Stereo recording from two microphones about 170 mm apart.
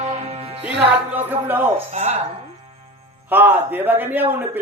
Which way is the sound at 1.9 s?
40° right (ahead or behind).